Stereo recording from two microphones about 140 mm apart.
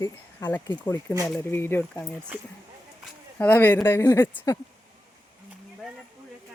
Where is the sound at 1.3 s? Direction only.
15° left (ahead or behind).